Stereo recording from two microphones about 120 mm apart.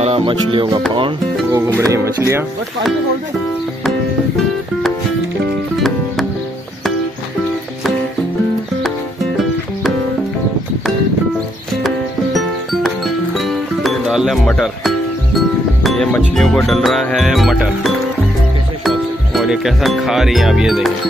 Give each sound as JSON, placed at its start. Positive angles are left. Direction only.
{"t": 0.0, "sound": "music", "side_deg": -50}
{"t": 1.5, "sound": "speech", "side_deg": -25}
{"t": 5.8, "sound": "music", "side_deg": 0}
{"t": 11.8, "sound": "music", "side_deg": 0}
{"t": 15.8, "sound": "speech", "side_deg": 0}
{"t": 16.3, "sound": "music", "side_deg": 0}
{"t": 18.9, "sound": "speech", "side_deg": 0}